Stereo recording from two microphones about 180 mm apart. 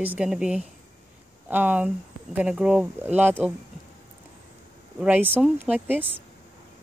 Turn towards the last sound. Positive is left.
turn(degrees=-10)  # may be behind; listen again after turning